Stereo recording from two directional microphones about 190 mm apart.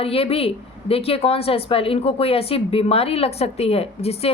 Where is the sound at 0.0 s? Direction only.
30° left (ahead or behind).